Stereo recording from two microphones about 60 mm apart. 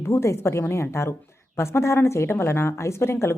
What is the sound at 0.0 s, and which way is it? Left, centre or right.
A woman's voice, left.